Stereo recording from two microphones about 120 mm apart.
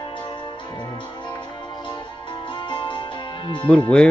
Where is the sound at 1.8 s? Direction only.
40° left (ahead or behind).